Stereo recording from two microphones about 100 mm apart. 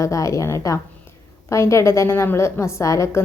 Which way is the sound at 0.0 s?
30° left (ahead or behind).